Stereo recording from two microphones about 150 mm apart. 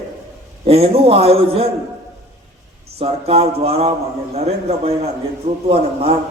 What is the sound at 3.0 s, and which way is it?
A man's voice, 40° right (ahead or behind).